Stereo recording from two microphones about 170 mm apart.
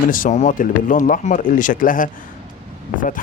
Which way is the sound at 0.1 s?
50° left (ahead or behind).